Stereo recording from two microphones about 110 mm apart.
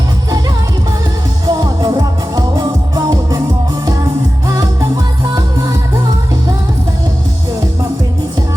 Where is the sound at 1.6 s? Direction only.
35° right (ahead or behind).